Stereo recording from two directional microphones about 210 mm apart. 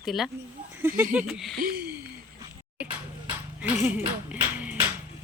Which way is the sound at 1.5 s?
45° right (ahead or behind).